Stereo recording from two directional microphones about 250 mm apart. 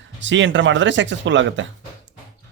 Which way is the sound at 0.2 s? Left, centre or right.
Right.